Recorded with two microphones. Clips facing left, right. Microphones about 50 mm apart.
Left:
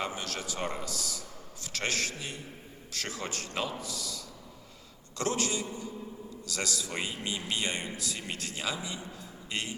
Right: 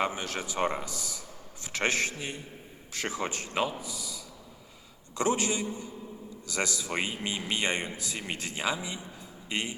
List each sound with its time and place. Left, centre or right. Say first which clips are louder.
0.0 s speech: right 4 dB; right